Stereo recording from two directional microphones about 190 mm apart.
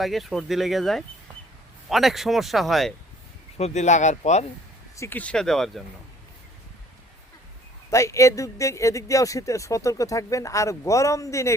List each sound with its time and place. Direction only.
0.0 s speech: centre (ahead or behind)
3.6 s speech: 40° left (ahead or behind)
4.9 s speech: 10° left (ahead or behind)
7.9 s speech: 15° left (ahead or behind)